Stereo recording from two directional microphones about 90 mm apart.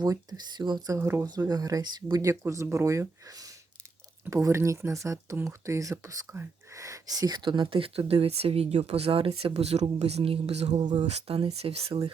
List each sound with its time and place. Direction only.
0.0 s speech: 50° right (ahead or behind)
0.9 s speech: 30° right (ahead or behind)
1.3 s speech: 45° right (ahead or behind); by 10.5 s 90° right
10.8 s speech: 75° right (ahead or behind)